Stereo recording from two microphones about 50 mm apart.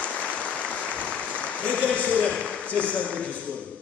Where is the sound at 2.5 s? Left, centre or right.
Left.